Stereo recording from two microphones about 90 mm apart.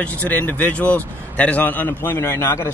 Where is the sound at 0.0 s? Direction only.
20° left (ahead or behind).